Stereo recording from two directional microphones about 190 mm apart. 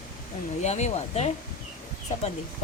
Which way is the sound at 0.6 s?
35° left (ahead or behind).